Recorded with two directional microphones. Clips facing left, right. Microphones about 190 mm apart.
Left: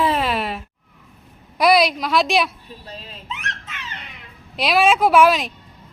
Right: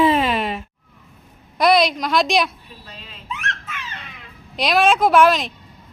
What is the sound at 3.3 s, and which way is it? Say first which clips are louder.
Squeak: right 3 dB; 20° left (ahead or behind).